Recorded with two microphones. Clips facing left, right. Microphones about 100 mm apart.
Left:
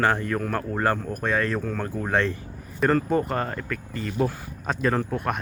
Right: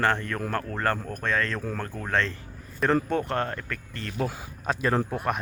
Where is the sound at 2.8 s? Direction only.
Centre (ahead or behind).